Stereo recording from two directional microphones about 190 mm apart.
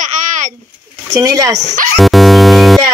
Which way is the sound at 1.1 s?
20° right (ahead or behind).